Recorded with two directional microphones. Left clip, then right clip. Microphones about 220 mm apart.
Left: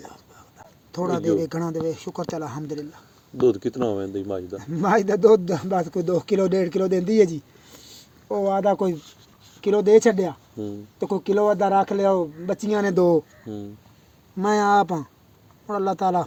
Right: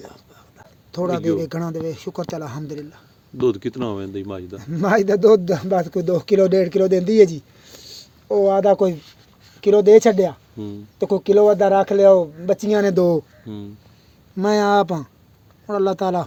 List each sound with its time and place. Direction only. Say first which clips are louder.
0.9 s speech: right 2 dB; 45° right (ahead or behind)
3.4 s speech: even; 5° left (ahead or behind)
4.6 s speech: right 3 dB; 50° right (ahead or behind)
14.3 s speech: right 2 dB; 45° right (ahead or behind)